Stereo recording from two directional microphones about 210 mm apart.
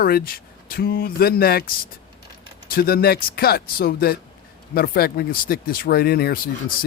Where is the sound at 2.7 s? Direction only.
45° left (ahead or behind).